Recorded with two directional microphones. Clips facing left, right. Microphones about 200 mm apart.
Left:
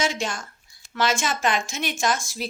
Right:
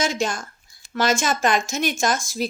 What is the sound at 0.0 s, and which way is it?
Speech, 40° right (ahead or behind).